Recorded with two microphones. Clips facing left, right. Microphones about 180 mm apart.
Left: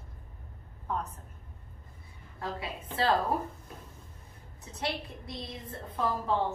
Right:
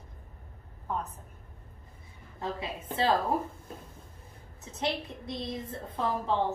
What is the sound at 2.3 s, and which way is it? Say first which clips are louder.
Speech: right 2 dB; 20° right (ahead or behind).